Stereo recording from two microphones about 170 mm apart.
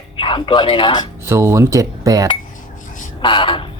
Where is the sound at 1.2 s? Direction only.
15° right (ahead or behind).